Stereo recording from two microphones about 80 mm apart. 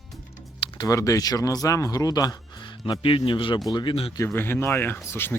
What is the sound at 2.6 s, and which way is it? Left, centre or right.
Speech, left.